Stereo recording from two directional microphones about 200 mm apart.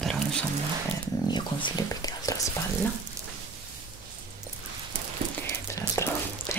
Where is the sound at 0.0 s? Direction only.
5° left (ahead or behind).